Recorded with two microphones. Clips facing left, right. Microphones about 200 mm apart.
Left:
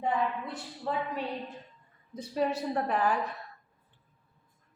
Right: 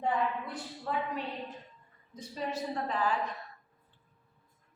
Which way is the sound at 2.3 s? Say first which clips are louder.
Left 6 dB; 60° left (ahead or behind).